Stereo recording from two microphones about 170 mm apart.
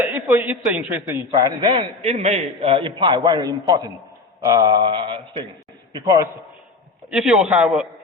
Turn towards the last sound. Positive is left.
turn(degrees=-5)  # may be behind; listen again after turning